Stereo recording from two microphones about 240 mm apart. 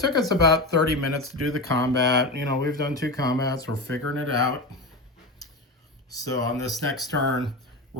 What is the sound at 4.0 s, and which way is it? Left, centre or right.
Speech, right.